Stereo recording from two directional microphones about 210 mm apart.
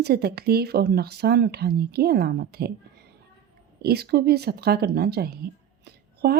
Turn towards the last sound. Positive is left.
turn(degrees=-50)  # may be behind; listen again after turning